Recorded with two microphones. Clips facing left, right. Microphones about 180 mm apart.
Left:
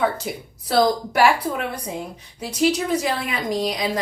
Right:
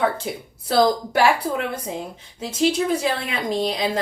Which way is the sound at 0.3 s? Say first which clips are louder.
Right 1 dB; 25° right (ahead or behind).